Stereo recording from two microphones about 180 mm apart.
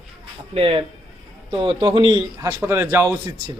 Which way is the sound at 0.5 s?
30° right (ahead or behind).